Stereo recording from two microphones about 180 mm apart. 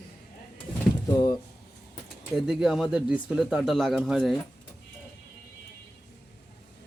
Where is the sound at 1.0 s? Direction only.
20° left (ahead or behind).